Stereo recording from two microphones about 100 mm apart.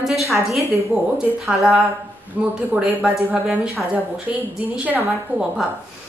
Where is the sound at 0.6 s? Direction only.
30° right (ahead or behind).